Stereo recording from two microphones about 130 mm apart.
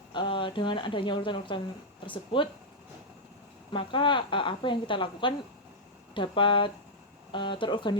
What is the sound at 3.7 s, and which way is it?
Speech, 40° left (ahead or behind).